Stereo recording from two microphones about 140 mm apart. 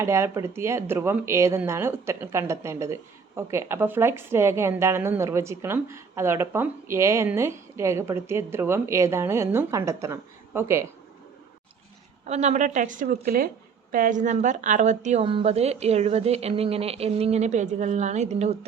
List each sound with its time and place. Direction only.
0.0 s speech: 20° right (ahead or behind)
12.2 s a woman's voice: 55° right (ahead or behind); by 13.5 s 90° right
13.9 s a woman's voice: 70° right (ahead or behind)
15.2 s speech: 40° right (ahead or behind)